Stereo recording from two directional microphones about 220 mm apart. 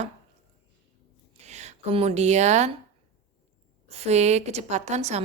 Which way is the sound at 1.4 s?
30° right (ahead or behind).